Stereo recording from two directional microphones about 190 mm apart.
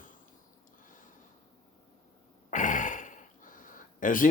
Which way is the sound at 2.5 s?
40° left (ahead or behind).